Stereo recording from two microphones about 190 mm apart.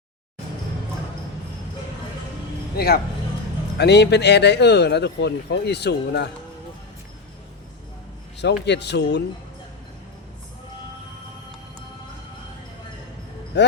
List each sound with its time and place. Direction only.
2.7 s a man's voice: 55° left (ahead or behind)
8.4 s speech: 65° left (ahead or behind)
13.5 s speech: 65° left (ahead or behind)